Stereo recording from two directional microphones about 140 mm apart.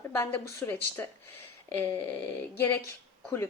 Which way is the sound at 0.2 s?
15° left (ahead or behind).